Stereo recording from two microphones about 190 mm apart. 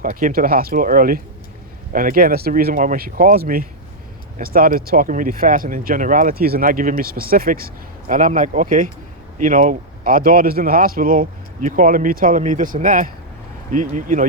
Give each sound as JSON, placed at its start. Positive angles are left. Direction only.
{"t": 0.0, "sound": "speech", "side_deg": -45}